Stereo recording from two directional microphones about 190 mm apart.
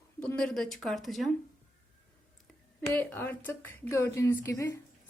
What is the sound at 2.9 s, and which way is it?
A woman's voice, 10° left (ahead or behind).